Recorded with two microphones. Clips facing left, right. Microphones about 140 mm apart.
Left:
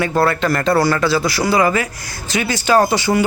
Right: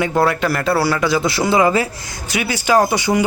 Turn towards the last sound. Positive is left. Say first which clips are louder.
# left 1 dB
turn(degrees=-15)  # may be behind; listen again after turning